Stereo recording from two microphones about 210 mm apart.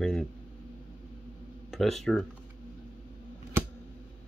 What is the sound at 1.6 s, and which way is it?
Speech, centre (ahead or behind).